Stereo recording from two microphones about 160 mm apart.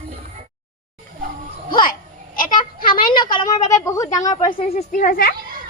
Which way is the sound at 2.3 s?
60° left (ahead or behind).